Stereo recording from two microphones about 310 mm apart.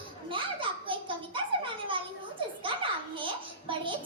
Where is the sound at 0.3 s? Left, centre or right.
Centre.